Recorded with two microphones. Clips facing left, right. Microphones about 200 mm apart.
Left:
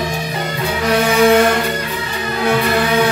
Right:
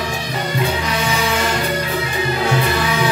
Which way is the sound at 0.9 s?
55° left (ahead or behind).